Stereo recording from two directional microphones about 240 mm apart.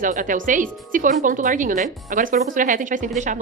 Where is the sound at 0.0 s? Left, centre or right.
Right.